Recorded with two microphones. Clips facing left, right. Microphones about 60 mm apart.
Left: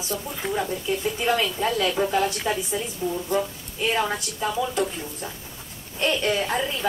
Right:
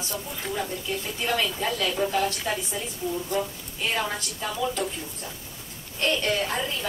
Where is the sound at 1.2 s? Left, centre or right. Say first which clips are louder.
Left 2 dB; centre.